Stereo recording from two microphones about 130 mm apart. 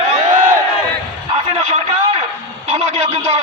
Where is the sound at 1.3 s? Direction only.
55° right (ahead or behind).